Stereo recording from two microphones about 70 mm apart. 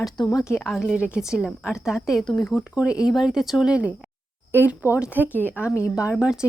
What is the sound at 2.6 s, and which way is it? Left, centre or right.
Speech, centre.